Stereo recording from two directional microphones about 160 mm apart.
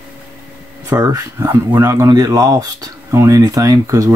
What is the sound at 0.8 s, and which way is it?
Speech, 20° right (ahead or behind).